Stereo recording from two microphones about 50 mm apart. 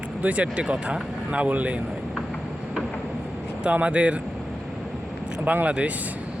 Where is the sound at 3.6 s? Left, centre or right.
Right.